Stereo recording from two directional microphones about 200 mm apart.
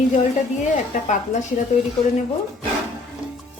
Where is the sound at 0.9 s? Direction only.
40° left (ahead or behind).